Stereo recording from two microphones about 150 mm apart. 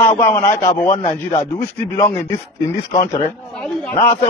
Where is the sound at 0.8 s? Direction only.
55° left (ahead or behind).